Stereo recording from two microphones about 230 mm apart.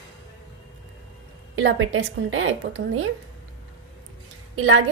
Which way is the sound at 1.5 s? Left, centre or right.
Right.